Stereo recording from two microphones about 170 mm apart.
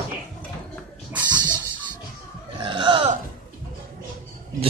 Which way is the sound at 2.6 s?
30° right (ahead or behind).